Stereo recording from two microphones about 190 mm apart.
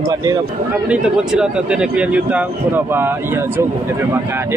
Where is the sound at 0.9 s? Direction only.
5° right (ahead or behind).